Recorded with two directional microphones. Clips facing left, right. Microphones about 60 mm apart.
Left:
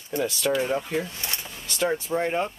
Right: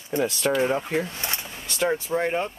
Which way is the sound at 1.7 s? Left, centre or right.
Centre.